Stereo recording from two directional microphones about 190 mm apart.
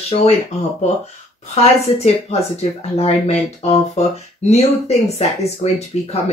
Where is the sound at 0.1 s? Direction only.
35° left (ahead or behind).